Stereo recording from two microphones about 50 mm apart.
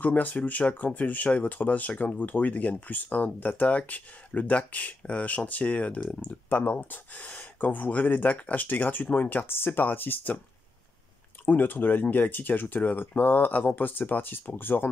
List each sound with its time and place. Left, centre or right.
0.0 s speech: left
11.4 s speech: left